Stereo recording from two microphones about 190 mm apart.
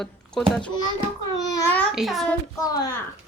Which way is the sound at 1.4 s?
20° left (ahead or behind).